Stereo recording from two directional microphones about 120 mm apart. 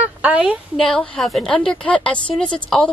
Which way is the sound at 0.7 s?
5° left (ahead or behind).